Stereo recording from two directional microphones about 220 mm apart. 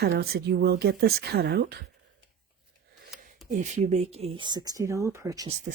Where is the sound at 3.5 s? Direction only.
35° right (ahead or behind); by 5.4 s 15° right (ahead or behind).